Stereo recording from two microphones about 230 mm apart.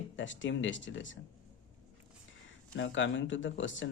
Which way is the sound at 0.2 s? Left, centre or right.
Left.